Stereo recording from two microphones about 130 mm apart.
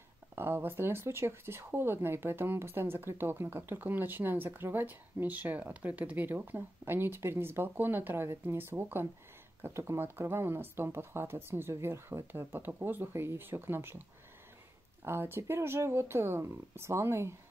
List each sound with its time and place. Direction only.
0.4 s speech: 15° right (ahead or behind)
15.0 s speech: 20° right (ahead or behind)